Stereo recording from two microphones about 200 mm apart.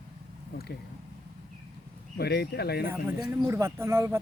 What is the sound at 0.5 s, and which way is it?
Speech, 55° left (ahead or behind).